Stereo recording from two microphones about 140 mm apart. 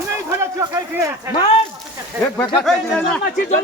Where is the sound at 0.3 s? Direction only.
20° right (ahead or behind).